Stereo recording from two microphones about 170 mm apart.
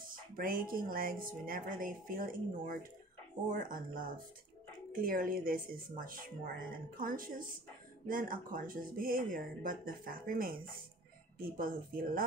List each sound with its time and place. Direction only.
0.0 s speech: 55° right (ahead or behind)